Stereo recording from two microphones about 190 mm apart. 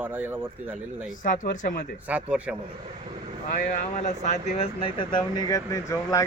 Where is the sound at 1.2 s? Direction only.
45° left (ahead or behind).